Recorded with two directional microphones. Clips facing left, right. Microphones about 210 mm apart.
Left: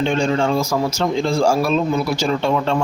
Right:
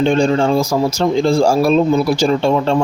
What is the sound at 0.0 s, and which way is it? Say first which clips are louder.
A man's voice: right 5 dB; 35° right (ahead or behind).